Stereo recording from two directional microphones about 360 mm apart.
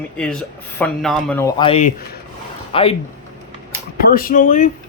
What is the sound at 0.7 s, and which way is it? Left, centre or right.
Speech, centre.